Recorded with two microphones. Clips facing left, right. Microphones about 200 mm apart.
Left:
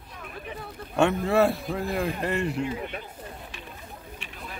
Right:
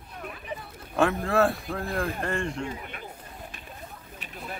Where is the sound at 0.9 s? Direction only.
Centre (ahead or behind).